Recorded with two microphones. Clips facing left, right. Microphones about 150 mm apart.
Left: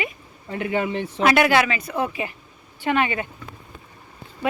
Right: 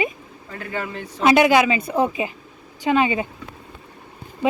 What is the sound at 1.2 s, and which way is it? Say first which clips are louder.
A woman's voice: right 3 dB; 20° right (ahead or behind).